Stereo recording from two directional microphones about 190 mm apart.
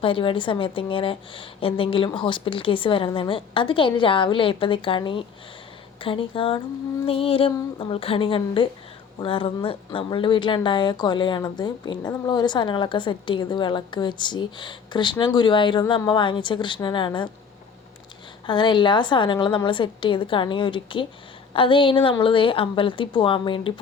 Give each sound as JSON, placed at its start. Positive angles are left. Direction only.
{"t": 0.0, "sound": "a woman's voice", "side_deg": 25}
{"t": 18.4, "sound": "a woman's voice", "side_deg": 25}